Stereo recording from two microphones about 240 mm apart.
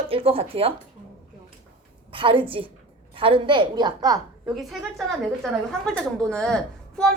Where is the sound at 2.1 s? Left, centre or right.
Right.